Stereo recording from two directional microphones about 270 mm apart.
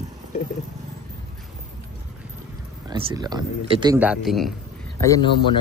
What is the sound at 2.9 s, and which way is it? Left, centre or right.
Speech, centre.